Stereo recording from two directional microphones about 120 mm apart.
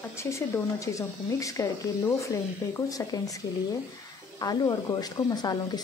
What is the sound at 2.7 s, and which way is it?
Speech, 30° left (ahead or behind).